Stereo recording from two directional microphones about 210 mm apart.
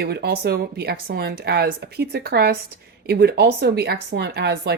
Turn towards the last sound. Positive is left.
turn(degrees=-50)  # may be behind; listen again after turning